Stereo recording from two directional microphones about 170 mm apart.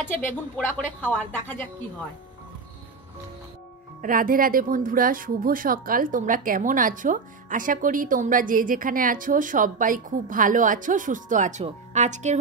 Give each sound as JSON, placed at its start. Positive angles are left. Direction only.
{"t": 0.1, "sound": "a woman's voice", "side_deg": 10}
{"t": 4.0, "sound": "speech", "side_deg": -55}